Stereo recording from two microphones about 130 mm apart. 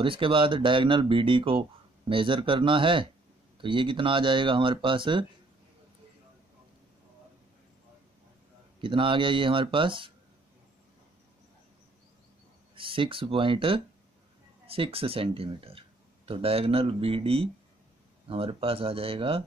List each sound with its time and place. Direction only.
0.0 s speech: 40° right (ahead or behind)
8.8 s speech: 40° right (ahead or behind)
12.7 s speech: 40° right (ahead or behind)